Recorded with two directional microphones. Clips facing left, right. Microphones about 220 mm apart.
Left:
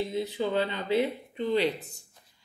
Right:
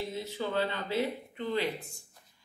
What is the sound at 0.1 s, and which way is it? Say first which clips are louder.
Speech: left 5 dB; 15° left (ahead or behind).